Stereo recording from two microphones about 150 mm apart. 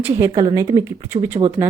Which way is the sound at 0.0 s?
20° right (ahead or behind).